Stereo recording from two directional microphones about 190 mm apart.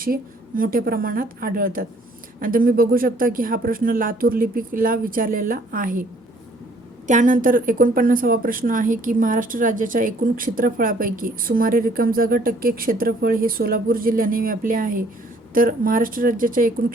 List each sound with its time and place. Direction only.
0.0 s speech: 50° right (ahead or behind)
7.1 s speech: 40° right (ahead or behind)